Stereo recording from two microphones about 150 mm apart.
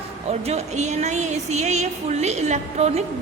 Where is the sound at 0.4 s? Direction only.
45° right (ahead or behind).